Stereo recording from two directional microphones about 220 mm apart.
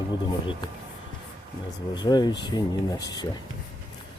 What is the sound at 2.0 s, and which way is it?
Speech, 20° left (ahead or behind).